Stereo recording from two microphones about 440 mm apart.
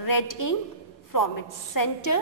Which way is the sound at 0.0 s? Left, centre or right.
Left.